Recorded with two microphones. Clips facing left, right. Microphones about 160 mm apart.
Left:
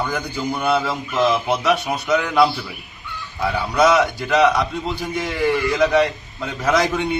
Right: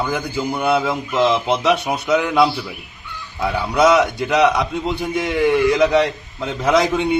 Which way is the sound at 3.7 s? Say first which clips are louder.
Right 2 dB; 20° right (ahead or behind).